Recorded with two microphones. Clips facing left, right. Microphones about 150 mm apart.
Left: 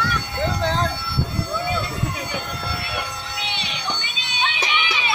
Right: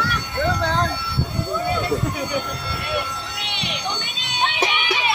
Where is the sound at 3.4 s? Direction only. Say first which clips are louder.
Right 1 dB; 65° right (ahead or behind).